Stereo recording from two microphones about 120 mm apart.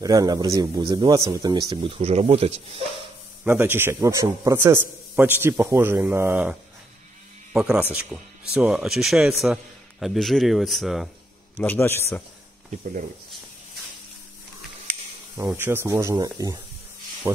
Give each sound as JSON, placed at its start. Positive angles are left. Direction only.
{"t": 0.0, "sound": "speech", "side_deg": -30}
{"t": 2.0, "sound": "speech", "side_deg": -60}
{"t": 3.4, "sound": "a man's voice", "side_deg": -20}
{"t": 11.5, "sound": "a man's voice", "side_deg": 15}
{"t": 15.3, "sound": "speech", "side_deg": -20}